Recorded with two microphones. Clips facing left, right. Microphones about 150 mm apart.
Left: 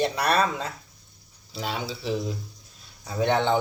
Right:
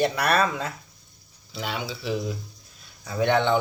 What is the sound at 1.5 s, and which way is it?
Speech, 35° left (ahead or behind).